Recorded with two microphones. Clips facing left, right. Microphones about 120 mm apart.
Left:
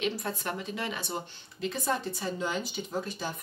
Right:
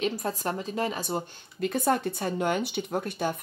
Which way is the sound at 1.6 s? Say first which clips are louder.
Right 6 dB; 55° right (ahead or behind).